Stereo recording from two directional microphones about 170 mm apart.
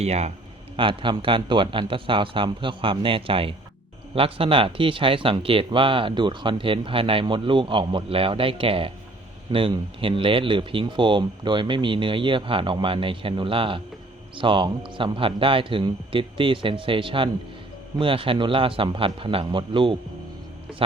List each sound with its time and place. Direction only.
0.0 s speech: 40° right (ahead or behind)
0.8 s speech: 30° right (ahead or behind)